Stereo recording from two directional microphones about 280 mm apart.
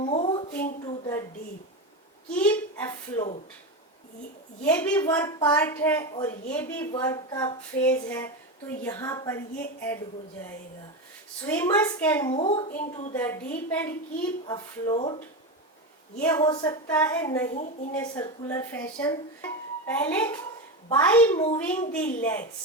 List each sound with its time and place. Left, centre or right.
0.0 s a sound: centre
0.9 s a woman's voice: centre
2.3 s speech: centre
4.6 s a child's voice: centre
11.4 s speech: centre
12.3 s a woman's voice: left
13.1 s speech: centre
16.1 s speech: centre
17.5 s a woman's voice: left
17.9 s a child's voice: centre